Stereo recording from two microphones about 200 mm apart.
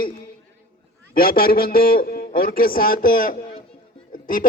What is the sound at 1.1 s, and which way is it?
A man's voice, 45° left (ahead or behind).